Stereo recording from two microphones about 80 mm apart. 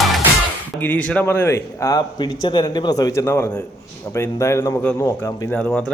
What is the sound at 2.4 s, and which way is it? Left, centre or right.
Speech, left.